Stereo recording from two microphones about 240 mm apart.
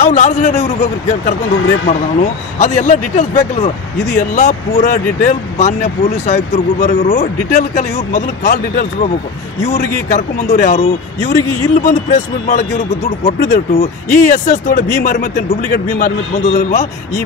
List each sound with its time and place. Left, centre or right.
0.0 s speech: left